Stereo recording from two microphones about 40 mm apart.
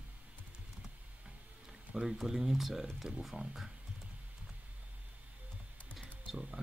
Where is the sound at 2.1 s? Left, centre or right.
Centre.